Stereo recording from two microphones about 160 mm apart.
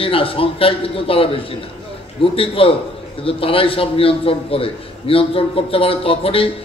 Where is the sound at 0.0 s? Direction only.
35° left (ahead or behind).